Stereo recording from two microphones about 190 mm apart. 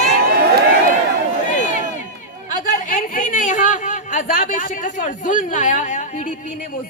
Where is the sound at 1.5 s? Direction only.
40° left (ahead or behind).